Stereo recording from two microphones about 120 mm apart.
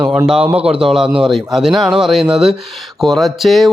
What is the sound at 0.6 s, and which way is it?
Speech, 55° right (ahead or behind).